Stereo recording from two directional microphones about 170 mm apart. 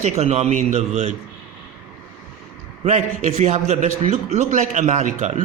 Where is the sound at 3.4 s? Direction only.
45° right (ahead or behind).